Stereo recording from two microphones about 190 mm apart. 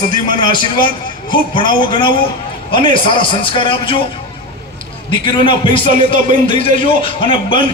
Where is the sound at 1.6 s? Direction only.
25° left (ahead or behind).